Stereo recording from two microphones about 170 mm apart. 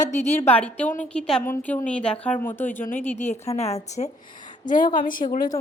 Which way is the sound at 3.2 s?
40° left (ahead or behind).